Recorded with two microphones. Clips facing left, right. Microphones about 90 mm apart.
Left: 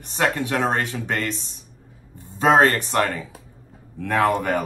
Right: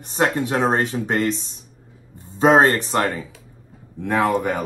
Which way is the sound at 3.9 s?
20° right (ahead or behind).